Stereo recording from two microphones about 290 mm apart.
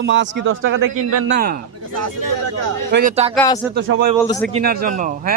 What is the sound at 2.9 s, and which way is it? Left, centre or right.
Speech, right.